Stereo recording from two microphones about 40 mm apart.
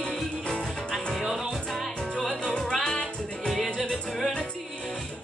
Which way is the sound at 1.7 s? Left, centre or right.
Centre.